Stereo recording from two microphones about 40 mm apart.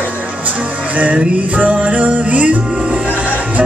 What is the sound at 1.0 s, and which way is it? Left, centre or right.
Music, right.